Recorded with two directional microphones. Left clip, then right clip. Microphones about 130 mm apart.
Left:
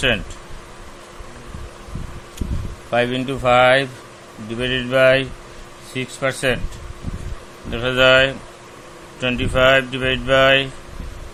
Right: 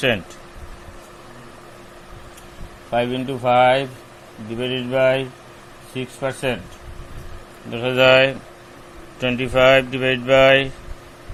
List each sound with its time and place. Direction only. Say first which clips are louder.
2.9 s speech: left 2 dB; 5° left (ahead or behind)
7.7 s speech: left 1 dB; 5° right (ahead or behind)
7.9 s speech: even; 20° right (ahead or behind)